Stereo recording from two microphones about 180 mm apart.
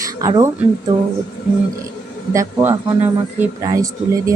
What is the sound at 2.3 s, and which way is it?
Speech, 15° right (ahead or behind).